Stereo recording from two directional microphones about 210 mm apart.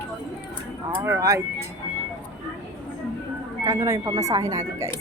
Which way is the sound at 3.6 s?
15° right (ahead or behind).